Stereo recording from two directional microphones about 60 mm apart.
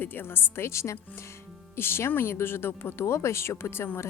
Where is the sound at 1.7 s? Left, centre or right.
Left.